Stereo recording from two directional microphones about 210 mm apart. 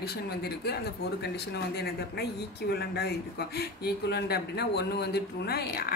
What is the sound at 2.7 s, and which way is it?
A man's voice, 50° left (ahead or behind).